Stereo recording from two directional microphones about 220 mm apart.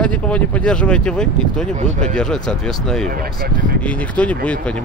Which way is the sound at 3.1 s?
40° right (ahead or behind).